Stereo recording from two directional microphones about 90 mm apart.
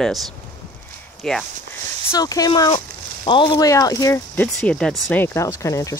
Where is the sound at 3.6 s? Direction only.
40° left (ahead or behind).